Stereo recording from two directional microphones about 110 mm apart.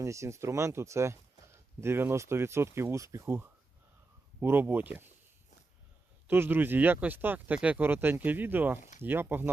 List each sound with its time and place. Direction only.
0.0 s speech: 25° right (ahead or behind)
6.2 s speech: 20° right (ahead or behind)